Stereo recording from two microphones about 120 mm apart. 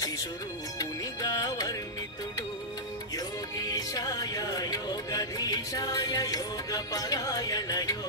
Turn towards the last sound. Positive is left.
turn(degrees=30)  # may be behind; listen again after turning